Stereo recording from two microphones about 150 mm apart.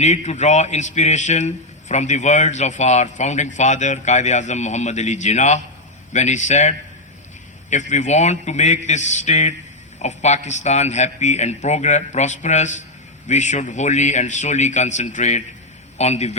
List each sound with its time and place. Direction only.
0.0 s a man's voice: 50° left (ahead or behind)